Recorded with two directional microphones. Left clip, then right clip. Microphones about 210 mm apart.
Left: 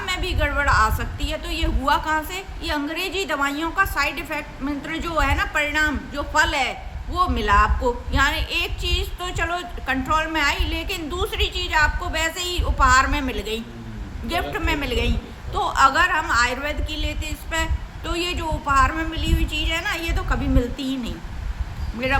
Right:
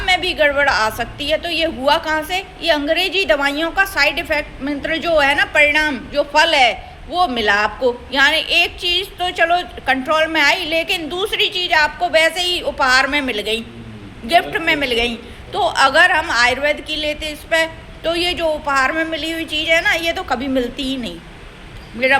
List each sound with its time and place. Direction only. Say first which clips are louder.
0.0 s a woman's voice: right 10 dB; 15° left (ahead or behind)